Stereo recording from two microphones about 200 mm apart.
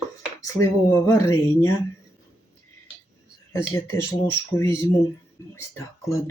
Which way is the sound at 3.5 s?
10° left (ahead or behind).